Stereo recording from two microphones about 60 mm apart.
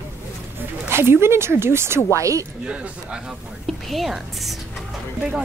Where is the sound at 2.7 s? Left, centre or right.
Centre.